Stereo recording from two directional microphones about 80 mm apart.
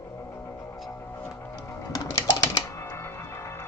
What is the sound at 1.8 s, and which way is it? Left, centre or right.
Music, left.